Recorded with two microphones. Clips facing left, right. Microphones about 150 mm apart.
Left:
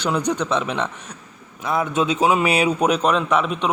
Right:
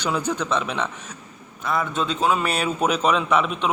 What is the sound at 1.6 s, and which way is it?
A man's voice, 5° left (ahead or behind).